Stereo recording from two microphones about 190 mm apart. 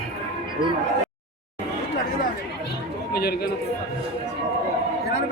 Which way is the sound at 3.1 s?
55° left (ahead or behind).